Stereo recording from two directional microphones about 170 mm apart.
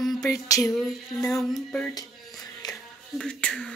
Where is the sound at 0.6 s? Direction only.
Centre (ahead or behind).